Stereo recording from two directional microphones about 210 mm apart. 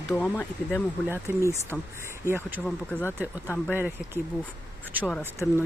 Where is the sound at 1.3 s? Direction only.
10° right (ahead or behind).